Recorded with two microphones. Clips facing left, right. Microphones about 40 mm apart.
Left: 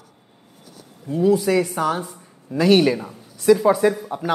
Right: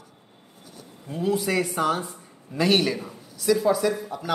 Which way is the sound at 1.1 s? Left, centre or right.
Centre.